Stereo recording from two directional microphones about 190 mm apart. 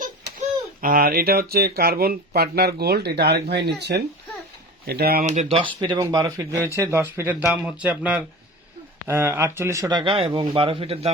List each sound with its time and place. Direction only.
0.8 s speech: 45° right (ahead or behind)
5.2 s speech: 40° right (ahead or behind)